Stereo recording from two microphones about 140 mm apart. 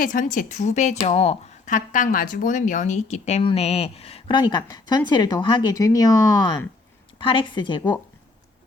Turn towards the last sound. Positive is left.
turn(degrees=35)  # may be behind; listen again after turning